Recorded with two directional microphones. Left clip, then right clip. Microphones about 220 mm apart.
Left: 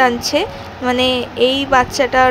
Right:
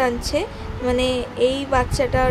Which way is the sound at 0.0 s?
10° left (ahead or behind).